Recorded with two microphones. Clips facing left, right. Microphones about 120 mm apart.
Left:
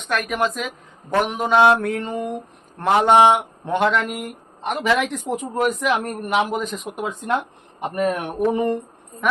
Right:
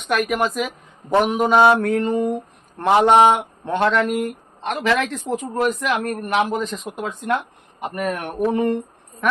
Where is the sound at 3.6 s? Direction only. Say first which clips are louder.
Right 2 dB; 10° left (ahead or behind).